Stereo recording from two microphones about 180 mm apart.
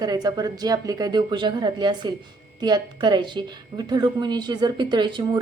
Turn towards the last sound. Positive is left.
turn(degrees=-25)  # may be behind; listen again after turning